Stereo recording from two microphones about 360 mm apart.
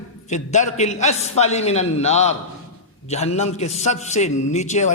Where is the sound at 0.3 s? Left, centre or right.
Centre.